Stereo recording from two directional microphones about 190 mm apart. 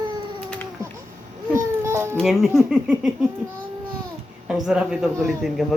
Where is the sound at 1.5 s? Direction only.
15° right (ahead or behind).